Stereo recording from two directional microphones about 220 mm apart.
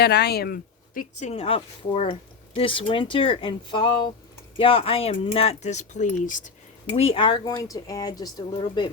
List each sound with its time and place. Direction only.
0.0 s speech: 50° left (ahead or behind)
1.3 s speech: 25° left (ahead or behind)